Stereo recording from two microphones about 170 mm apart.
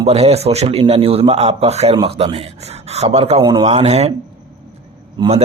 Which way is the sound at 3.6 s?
40° right (ahead or behind).